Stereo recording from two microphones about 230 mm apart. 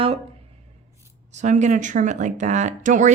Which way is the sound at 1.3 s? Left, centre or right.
Right.